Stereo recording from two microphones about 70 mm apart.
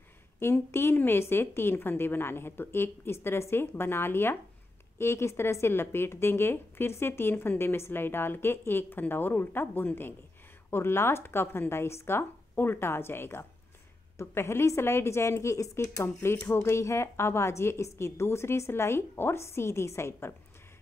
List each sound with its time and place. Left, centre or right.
0.4 s speech: left